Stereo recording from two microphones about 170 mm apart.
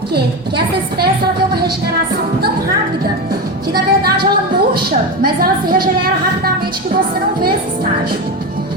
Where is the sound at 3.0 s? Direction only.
65° right (ahead or behind).